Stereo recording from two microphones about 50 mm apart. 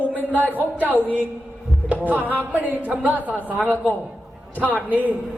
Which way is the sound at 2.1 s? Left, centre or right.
Right.